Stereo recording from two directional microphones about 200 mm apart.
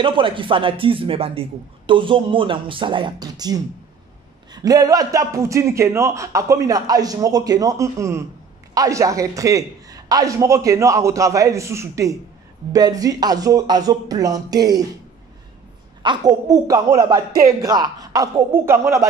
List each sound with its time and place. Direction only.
0.0 s a man's voice: 25° right (ahead or behind)
16.0 s a man's voice: 20° right (ahead or behind)